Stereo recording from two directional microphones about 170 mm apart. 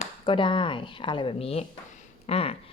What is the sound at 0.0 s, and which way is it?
Speech, 30° left (ahead or behind).